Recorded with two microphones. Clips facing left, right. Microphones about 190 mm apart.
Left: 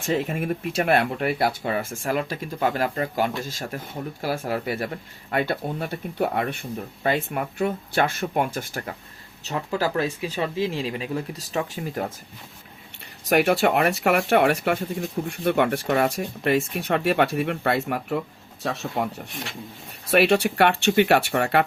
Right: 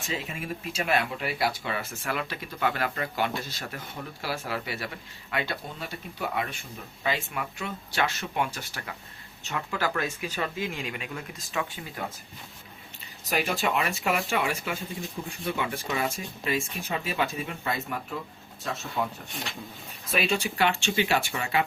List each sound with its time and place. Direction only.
0.1 s speech: 55° left (ahead or behind)
9.4 s speech: 35° left (ahead or behind)
13.2 s speech: 65° left (ahead or behind)
20.1 s speech: 70° left (ahead or behind)